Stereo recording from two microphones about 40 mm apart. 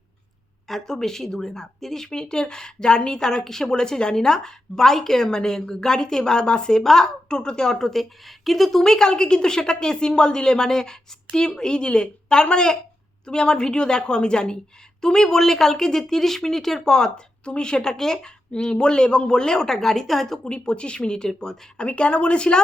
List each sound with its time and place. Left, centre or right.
0.7 s speech: centre
8.2 s speech: centre
8.8 s speech: centre
20.4 s speech: left
21.8 s speech: left